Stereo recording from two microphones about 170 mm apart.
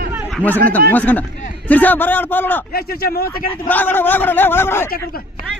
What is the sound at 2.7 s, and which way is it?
Speech, 65° left (ahead or behind).